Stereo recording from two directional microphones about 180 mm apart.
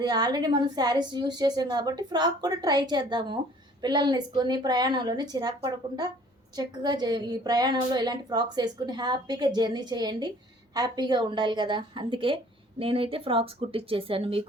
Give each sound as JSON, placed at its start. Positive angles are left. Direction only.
{"t": 0.0, "sound": "a woman's voice", "side_deg": -20}